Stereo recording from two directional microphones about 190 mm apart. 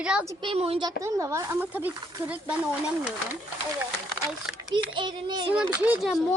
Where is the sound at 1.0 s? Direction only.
15° right (ahead or behind).